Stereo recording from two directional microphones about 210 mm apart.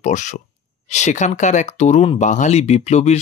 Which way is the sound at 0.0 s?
35° left (ahead or behind).